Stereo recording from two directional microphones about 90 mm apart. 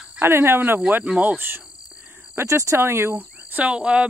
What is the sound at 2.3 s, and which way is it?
Speech, 30° right (ahead or behind).